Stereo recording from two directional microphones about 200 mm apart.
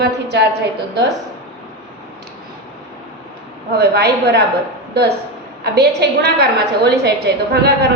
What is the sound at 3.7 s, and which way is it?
A woman's voice, 55° right (ahead or behind).